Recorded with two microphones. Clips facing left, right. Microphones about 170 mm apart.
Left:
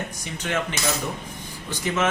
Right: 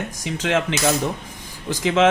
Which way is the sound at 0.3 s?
90° right.